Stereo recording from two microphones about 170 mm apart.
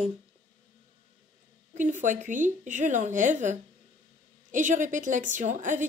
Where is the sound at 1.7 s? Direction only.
45° right (ahead or behind).